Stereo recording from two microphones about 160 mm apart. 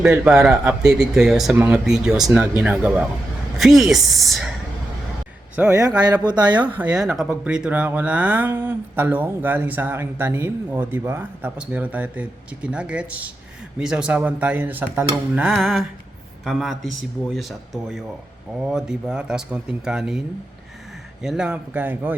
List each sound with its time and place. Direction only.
0.0 s speech: 5° right (ahead or behind)
5.6 s speech: 10° right (ahead or behind)
6.2 s speech: 25° right (ahead or behind)
6.6 s speech: 10° right (ahead or behind)
18.6 s speech: 5° right (ahead or behind)